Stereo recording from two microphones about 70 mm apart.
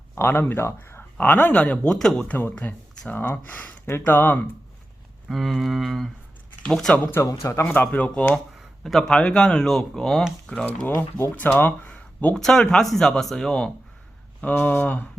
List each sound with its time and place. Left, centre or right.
0.2 s speech: left; by 2.2 s centre
2.2 s speech: left
5.3 s speech: centre
7.3 s a man's voice: left
7.9 s speech: left
8.8 s speech: centre
11.3 s speech: left
12.3 s speech: centre
14.4 s speech: left